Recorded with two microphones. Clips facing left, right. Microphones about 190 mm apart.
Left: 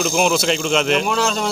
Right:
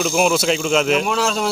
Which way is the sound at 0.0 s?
Centre (ahead or behind).